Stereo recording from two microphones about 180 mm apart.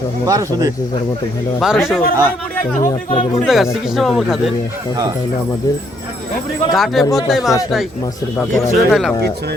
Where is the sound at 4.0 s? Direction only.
Centre (ahead or behind).